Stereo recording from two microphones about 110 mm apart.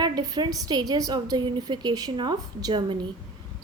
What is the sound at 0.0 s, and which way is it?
A woman's voice, 35° right (ahead or behind).